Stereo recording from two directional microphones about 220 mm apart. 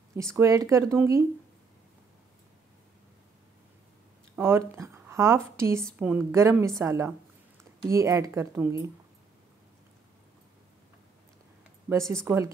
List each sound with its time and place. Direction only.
0.1 s speech: 10° right (ahead or behind)
4.4 s speech: 10° right (ahead or behind)
11.9 s speech: 15° right (ahead or behind)